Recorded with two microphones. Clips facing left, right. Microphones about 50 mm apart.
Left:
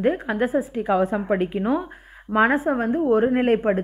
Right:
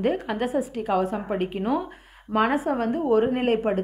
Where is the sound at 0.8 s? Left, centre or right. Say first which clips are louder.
Left 4 dB; left.